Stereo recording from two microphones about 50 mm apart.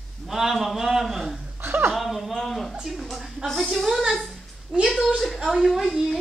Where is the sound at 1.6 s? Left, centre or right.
Right.